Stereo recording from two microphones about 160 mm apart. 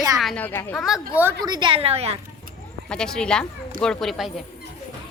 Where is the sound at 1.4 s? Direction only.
30° right (ahead or behind).